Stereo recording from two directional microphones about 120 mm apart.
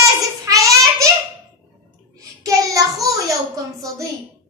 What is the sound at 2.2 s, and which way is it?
Child singing, 25° right (ahead or behind).